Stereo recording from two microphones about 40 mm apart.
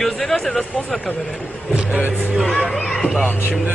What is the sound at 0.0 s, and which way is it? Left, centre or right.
Music, centre.